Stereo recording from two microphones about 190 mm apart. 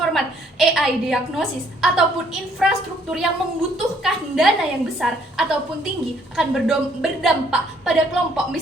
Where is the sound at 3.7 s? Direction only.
Centre (ahead or behind).